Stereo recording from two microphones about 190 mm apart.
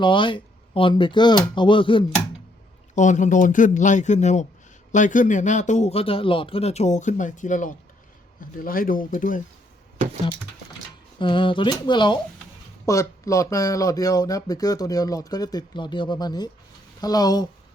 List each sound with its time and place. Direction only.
0.0 s speech: 25° left (ahead or behind)
2.9 s speech: 40° left (ahead or behind)
11.2 s speech: 25° left (ahead or behind)